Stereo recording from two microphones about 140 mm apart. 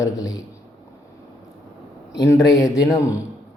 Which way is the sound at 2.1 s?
25° left (ahead or behind).